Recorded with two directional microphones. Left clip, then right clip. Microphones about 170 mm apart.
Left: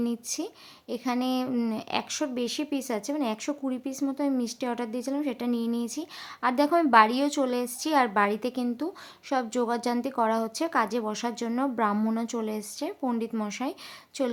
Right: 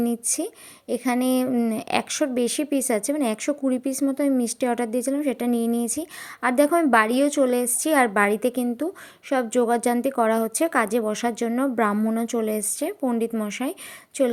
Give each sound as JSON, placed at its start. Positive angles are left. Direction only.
{"t": 0.0, "sound": "a woman's voice", "side_deg": -25}